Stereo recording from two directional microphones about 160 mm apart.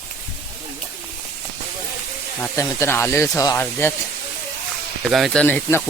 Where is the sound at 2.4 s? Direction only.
15° left (ahead or behind).